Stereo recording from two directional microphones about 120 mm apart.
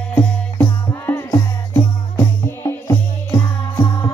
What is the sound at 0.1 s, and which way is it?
Music, 20° left (ahead or behind).